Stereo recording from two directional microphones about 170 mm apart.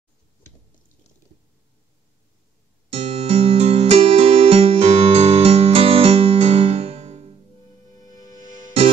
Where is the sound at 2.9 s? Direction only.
35° right (ahead or behind).